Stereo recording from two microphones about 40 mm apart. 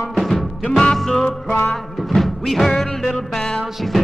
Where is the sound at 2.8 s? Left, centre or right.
Centre.